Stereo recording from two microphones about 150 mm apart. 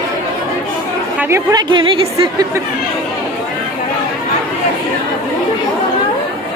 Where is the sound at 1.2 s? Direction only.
15° right (ahead or behind).